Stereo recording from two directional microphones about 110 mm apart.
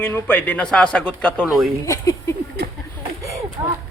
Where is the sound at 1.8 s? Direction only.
30° left (ahead or behind).